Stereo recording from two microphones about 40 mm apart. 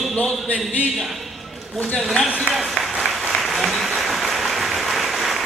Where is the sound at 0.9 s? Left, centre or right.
Centre.